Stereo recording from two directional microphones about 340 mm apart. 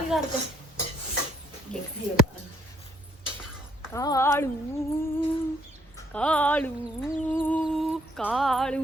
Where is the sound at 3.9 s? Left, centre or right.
Centre.